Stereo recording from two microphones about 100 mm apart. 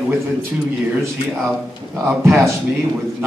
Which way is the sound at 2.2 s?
30° right (ahead or behind).